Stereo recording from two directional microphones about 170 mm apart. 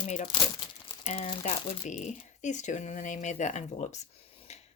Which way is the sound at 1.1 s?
35° left (ahead or behind).